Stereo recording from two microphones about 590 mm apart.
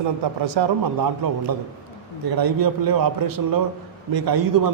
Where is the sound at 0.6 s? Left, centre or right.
Right.